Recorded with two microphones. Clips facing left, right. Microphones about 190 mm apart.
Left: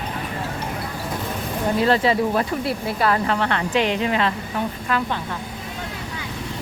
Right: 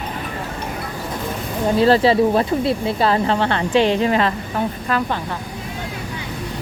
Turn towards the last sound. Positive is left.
turn(degrees=-40)  # may be behind; listen again after turning